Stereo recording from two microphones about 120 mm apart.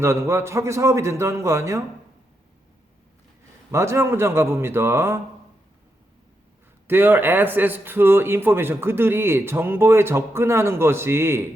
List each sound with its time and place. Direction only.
0.0 s speech: 20° right (ahead or behind)
3.7 s speech: 25° right (ahead or behind)
6.8 s speech: 20° right (ahead or behind)